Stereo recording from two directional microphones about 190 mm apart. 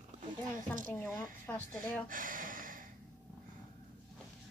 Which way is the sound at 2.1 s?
45° right (ahead or behind).